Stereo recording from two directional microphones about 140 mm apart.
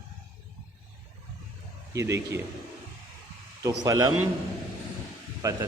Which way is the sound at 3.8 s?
25° right (ahead or behind).